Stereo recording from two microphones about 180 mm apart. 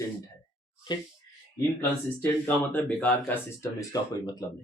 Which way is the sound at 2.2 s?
10° left (ahead or behind).